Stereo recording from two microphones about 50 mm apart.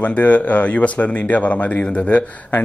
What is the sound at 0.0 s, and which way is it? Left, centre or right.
Speech, left.